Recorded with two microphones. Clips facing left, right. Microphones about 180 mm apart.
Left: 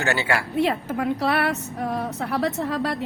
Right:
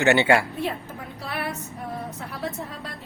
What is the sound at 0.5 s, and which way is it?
A woman's voice, 80° left.